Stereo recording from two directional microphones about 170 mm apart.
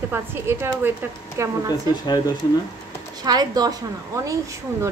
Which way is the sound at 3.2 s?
20° right (ahead or behind).